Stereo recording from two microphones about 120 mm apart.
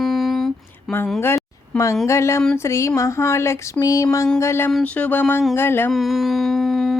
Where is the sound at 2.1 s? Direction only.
25° left (ahead or behind).